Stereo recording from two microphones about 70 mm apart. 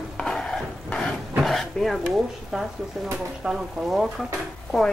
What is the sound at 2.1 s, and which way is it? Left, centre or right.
Speech, centre.